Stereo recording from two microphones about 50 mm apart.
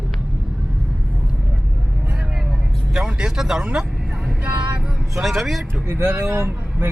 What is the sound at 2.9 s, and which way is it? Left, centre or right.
Speech, centre.